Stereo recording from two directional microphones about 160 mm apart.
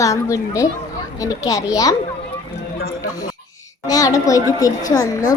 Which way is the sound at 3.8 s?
20° left (ahead or behind).